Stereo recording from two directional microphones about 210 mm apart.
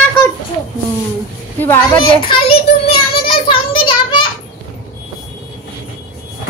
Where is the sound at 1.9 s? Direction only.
25° left (ahead or behind).